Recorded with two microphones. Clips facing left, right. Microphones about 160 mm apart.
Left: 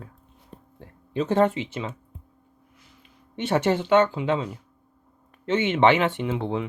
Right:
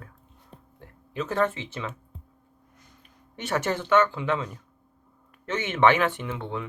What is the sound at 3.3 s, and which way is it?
Speech, 20° left (ahead or behind).